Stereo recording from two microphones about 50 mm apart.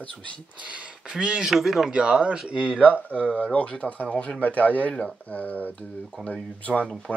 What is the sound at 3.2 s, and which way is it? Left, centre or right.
Speech, left.